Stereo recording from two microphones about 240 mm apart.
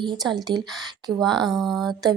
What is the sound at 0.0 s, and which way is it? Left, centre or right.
Speech, centre.